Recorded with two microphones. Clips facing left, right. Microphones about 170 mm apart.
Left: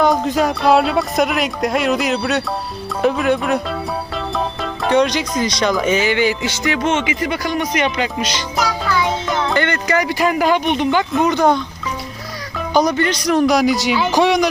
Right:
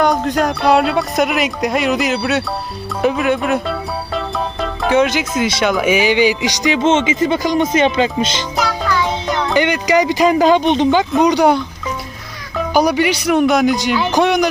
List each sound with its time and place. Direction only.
0.0 s speech: centre (ahead or behind); by 8.4 s 25° right (ahead or behind)
8.5 s music: centre (ahead or behind)
9.5 s speech: 15° right (ahead or behind)
12.7 s speech: 10° right (ahead or behind)